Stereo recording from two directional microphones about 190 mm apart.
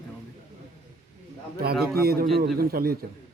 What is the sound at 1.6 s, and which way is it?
A man's voice, 55° right (ahead or behind).